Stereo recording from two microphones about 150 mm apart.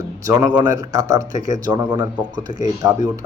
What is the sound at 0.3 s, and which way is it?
A man's voice, 25° right (ahead or behind).